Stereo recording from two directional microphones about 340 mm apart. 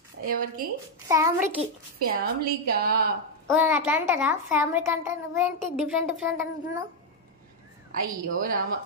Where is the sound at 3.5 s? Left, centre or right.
Centre.